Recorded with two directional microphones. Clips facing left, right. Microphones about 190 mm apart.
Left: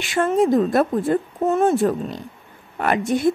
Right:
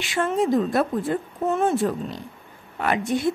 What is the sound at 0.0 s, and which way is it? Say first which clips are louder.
Speech: left 4 dB; 50° left (ahead or behind).